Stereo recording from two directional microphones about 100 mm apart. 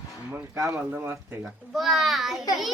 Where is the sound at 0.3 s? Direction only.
25° right (ahead or behind).